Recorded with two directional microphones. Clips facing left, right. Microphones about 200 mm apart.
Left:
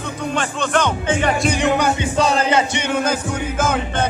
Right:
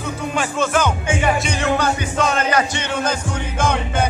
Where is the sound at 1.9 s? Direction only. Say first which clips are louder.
Left 2 dB; 35° left (ahead or behind).